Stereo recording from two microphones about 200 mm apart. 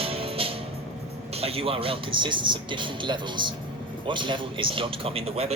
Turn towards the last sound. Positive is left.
turn(degrees=-30)  # may be behind; listen again after turning